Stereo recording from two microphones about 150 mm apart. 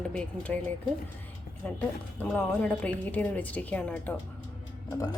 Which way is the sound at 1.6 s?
10° left (ahead or behind).